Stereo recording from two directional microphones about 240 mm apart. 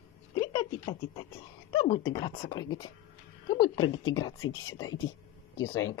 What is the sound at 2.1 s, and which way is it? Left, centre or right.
A woman's voice, centre.